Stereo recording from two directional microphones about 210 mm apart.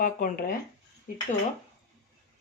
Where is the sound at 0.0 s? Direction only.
45° left (ahead or behind).